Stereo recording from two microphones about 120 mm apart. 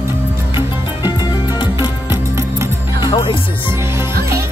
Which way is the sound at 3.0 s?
40° left (ahead or behind).